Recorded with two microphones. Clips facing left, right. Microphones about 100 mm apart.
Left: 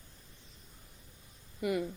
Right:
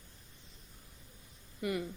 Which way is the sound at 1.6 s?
90° left.